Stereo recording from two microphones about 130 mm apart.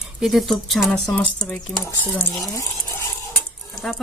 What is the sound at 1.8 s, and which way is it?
Dishes, 20° left (ahead or behind).